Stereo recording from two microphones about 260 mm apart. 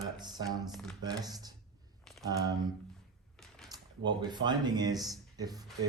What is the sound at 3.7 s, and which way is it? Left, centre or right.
Speech, centre.